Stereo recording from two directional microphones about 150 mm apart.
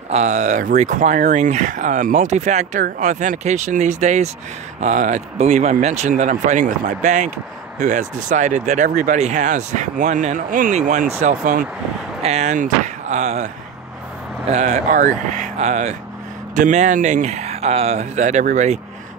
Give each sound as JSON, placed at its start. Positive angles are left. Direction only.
{"t": 0.1, "sound": "speech", "side_deg": -50}
{"t": 14.5, "sound": "speech", "side_deg": -50}